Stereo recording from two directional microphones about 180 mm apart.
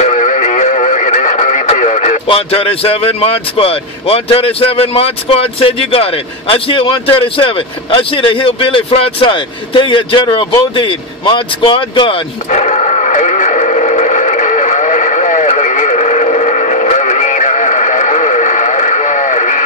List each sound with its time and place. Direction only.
0.0 s radio: 40° left (ahead or behind)
2.2 s speech: 30° left (ahead or behind)
12.4 s radio: 40° left (ahead or behind)